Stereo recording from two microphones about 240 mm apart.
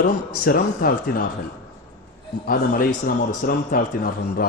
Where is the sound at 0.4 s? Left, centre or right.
Left.